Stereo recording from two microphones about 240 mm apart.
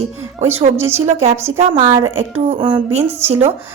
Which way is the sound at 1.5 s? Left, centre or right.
Right.